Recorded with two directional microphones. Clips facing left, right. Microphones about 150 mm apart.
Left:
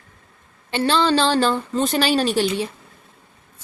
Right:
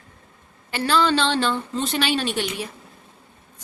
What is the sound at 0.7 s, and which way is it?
A woman's voice, 25° left (ahead or behind).